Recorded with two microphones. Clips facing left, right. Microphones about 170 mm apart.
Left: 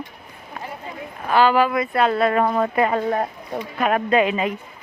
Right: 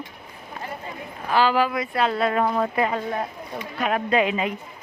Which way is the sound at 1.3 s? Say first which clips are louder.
Left 3 dB; 55° left (ahead or behind).